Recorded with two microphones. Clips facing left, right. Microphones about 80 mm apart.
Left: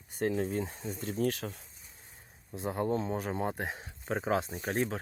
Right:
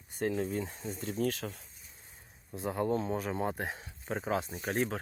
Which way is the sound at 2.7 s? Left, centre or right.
Centre.